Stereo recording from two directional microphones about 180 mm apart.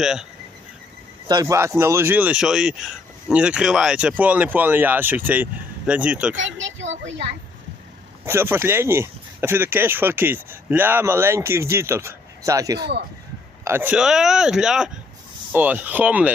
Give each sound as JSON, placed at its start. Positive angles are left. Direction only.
{"t": 0.0, "sound": "speech", "side_deg": -5}
{"t": 1.3, "sound": "speech", "side_deg": -20}
{"t": 6.3, "sound": "a child's voice", "side_deg": -90}
{"t": 8.2, "sound": "speech", "side_deg": -15}